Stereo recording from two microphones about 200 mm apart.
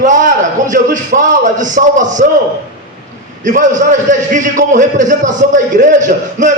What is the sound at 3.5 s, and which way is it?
A man's voice, 40° right (ahead or behind).